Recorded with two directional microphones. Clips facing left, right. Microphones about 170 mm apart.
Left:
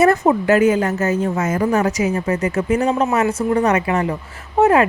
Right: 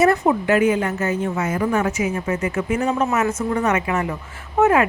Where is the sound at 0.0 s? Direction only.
45° left (ahead or behind).